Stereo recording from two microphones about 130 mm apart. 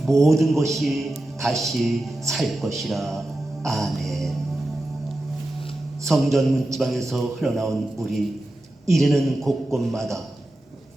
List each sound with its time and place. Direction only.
0.0 s a man's voice: centre (ahead or behind)
3.6 s music: centre (ahead or behind)
6.1 s a man's voice: centre (ahead or behind)